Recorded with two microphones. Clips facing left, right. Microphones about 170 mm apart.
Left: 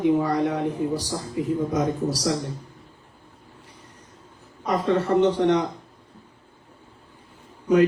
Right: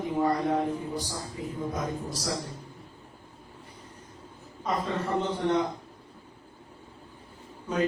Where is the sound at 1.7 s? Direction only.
80° left.